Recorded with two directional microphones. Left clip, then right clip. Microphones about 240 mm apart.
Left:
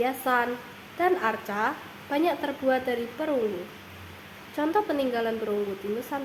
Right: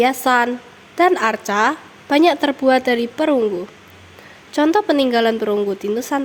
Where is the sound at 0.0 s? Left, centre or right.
Right.